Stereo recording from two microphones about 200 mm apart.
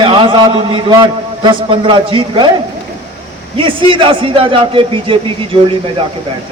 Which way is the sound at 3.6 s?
25° right (ahead or behind).